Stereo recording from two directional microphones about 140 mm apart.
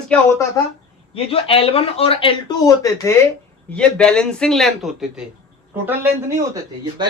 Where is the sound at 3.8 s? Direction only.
5° left (ahead or behind).